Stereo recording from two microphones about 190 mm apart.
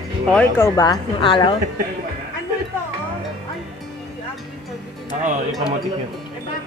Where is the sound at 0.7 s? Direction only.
25° left (ahead or behind).